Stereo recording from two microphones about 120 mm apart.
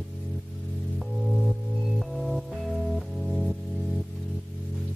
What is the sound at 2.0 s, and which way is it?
Music, centre (ahead or behind).